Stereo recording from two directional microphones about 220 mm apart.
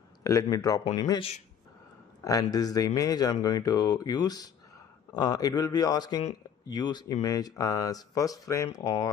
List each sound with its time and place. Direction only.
0.2 s speech: 15° left (ahead or behind)